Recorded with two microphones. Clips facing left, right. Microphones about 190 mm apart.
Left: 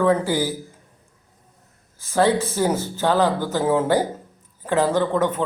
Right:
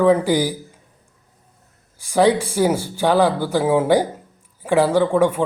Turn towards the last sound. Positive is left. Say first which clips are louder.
# right 4 dB
turn(degrees=-10)  # may be behind; listen again after turning